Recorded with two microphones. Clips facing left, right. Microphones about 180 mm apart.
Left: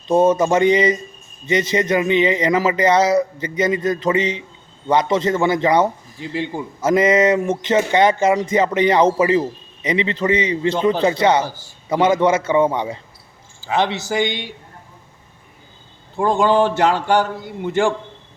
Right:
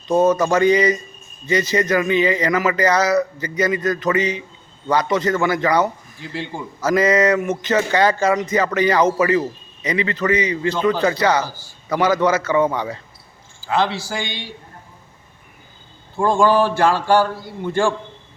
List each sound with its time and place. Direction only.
0.1 s a man's voice: 25° left (ahead or behind)
16.1 s a man's voice: 20° left (ahead or behind)